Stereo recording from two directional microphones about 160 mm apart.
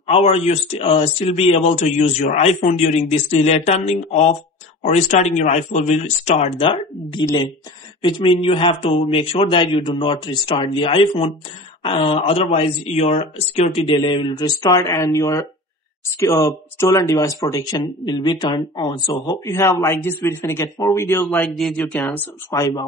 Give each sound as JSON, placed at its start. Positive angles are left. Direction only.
{"t": 0.0, "sound": "speech", "side_deg": 40}
{"t": 21.5, "sound": "speech", "side_deg": 0}
{"t": 22.0, "sound": "speech", "side_deg": 20}